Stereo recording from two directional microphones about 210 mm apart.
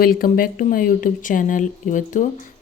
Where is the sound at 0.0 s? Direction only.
45° left (ahead or behind).